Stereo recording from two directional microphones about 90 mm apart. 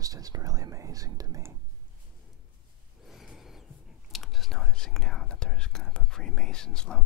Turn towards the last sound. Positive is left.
turn(degrees=10)  # may be behind; listen again after turning